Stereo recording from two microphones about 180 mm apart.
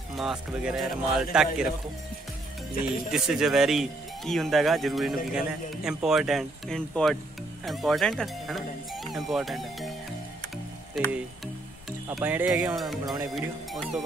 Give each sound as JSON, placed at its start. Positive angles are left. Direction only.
{"t": 0.1, "sound": "speech", "side_deg": 0}
{"t": 3.1, "sound": "speech", "side_deg": -5}
{"t": 11.0, "sound": "speech", "side_deg": 0}
{"t": 12.1, "sound": "speech", "side_deg": -10}
{"t": 13.0, "sound": "speech", "side_deg": -20}
{"t": 13.3, "sound": "speech", "side_deg": 0}